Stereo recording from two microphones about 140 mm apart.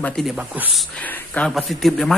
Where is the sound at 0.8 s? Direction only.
10° left (ahead or behind).